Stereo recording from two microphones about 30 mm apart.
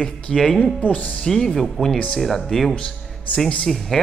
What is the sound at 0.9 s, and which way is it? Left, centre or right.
Speech, left.